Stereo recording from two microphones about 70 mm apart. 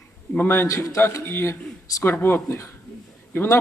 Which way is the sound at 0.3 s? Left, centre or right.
Left.